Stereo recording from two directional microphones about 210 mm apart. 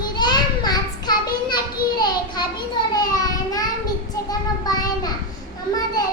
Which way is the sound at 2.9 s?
15° left (ahead or behind).